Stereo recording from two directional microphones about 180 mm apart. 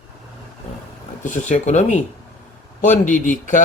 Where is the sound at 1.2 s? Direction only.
40° left (ahead or behind).